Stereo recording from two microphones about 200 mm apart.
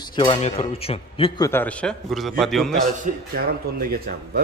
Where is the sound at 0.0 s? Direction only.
25° left (ahead or behind).